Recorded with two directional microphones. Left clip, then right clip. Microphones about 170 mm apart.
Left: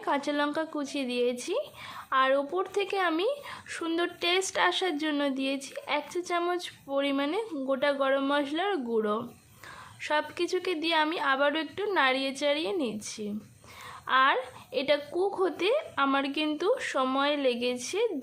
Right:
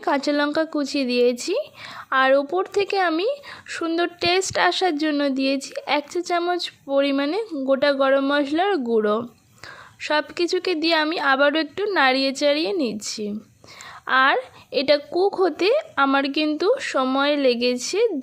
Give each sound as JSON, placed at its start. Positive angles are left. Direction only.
{"t": 0.0, "sound": "a woman's voice", "side_deg": -35}